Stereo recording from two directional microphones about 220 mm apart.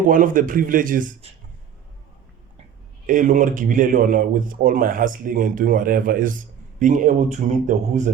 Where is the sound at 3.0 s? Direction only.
35° right (ahead or behind).